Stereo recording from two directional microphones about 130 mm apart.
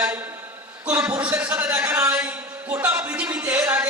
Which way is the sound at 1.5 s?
15° right (ahead or behind).